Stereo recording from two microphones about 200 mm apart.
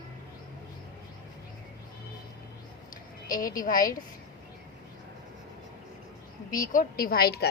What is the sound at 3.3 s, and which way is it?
Speech, 45° left (ahead or behind).